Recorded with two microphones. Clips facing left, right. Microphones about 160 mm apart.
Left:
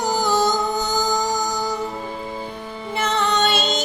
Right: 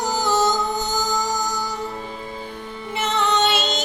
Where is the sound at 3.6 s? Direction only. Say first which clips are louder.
Left 2 dB; 15° left (ahead or behind).